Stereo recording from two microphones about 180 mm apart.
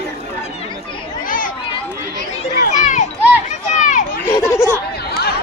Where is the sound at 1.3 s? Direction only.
50° left (ahead or behind).